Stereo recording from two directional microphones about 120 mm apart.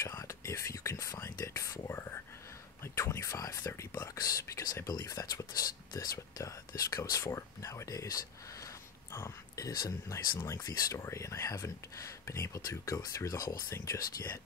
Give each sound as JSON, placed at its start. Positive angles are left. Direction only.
{"t": 0.0, "sound": "speech", "side_deg": 25}